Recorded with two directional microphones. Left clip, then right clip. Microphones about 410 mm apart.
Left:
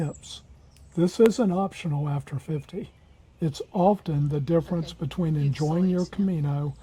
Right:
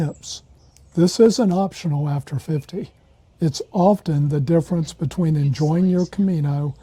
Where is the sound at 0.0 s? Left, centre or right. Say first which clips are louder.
Right 6 dB; right.